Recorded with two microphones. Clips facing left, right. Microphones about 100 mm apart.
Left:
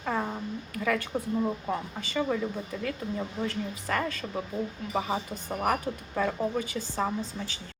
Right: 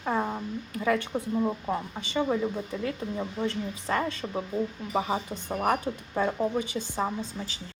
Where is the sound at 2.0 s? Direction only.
25° right (ahead or behind).